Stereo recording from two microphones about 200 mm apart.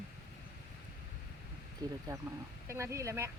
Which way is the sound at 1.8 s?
20° right (ahead or behind).